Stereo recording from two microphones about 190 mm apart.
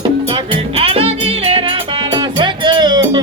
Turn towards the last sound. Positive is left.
turn(degrees=-25)  # may be behind; listen again after turning